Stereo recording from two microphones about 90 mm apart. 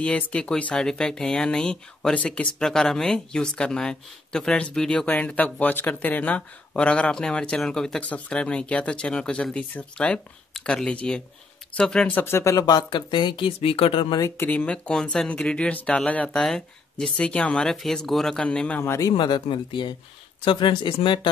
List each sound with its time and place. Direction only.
0.0 s speech: 10° left (ahead or behind)
12.1 s speech: 25° left (ahead or behind)
12.5 s speech: 50° left (ahead or behind); by 14.1 s 90° left
14.3 s speech: 25° left (ahead or behind)
19.1 s speech: 60° left (ahead or behind)